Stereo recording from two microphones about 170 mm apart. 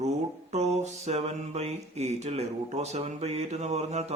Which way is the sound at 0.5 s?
40° right (ahead or behind).